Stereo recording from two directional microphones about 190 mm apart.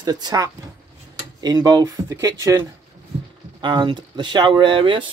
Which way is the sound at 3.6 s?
25° right (ahead or behind).